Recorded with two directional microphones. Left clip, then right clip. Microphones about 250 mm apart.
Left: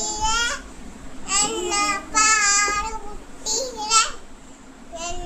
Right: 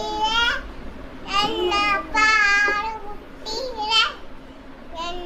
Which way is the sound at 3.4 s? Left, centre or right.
Centre.